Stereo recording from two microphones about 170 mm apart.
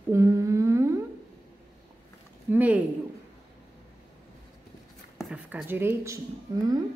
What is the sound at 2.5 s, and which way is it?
Speech, 10° right (ahead or behind).